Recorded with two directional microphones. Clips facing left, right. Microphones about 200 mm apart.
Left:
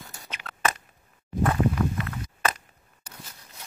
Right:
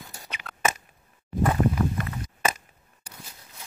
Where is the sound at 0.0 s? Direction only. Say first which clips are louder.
Even; centre (ahead or behind).